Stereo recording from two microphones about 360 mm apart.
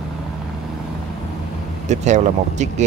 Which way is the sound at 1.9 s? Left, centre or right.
Centre.